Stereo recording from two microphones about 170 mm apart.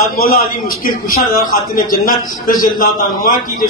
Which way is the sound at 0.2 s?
60° left (ahead or behind).